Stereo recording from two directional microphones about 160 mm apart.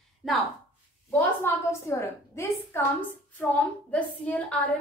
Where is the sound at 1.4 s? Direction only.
15° left (ahead or behind).